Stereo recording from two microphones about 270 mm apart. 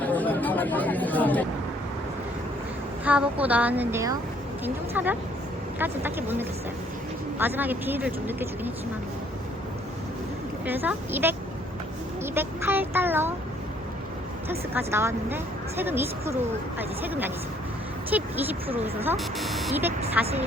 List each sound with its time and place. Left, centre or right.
0.0 s chatter: centre
3.0 s a woman's voice: centre
10.7 s speech: centre
14.7 s speech: centre